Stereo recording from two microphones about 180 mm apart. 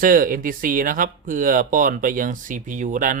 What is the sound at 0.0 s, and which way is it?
Speech, 50° right (ahead or behind).